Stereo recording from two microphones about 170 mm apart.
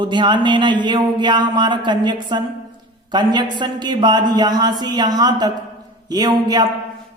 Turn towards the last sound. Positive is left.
turn(degrees=-25)  # may be behind; listen again after turning